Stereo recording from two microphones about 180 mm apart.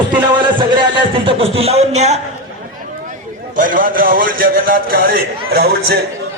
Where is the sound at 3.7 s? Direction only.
50° right (ahead or behind).